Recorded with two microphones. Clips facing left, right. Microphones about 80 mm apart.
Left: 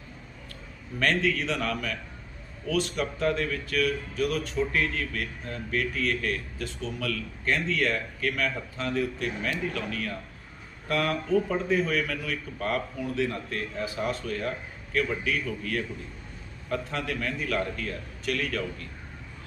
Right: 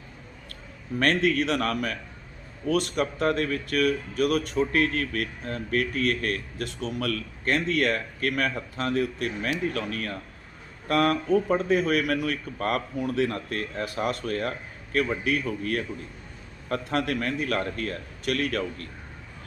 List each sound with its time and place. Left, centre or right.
0.9 s speech: right
6.6 s a man's voice: right
11.5 s speech: right